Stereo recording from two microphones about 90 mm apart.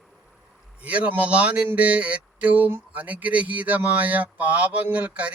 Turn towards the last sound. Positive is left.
turn(degrees=-15)  # may be behind; listen again after turning